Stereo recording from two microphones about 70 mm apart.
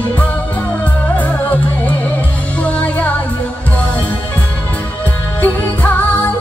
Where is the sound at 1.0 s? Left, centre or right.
Left.